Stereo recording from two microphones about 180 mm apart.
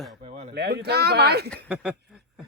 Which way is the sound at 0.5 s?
65° right (ahead or behind).